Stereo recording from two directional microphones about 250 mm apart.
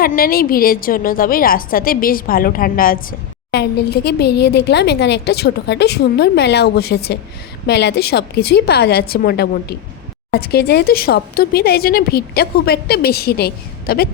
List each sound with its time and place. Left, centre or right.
0.0 s a woman's voice: left